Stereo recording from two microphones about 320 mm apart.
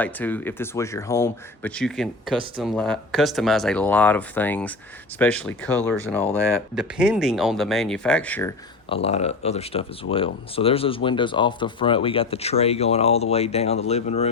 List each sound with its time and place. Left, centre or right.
0.0 s speech: centre